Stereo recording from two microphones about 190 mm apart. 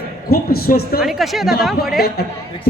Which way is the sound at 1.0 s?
Centre (ahead or behind).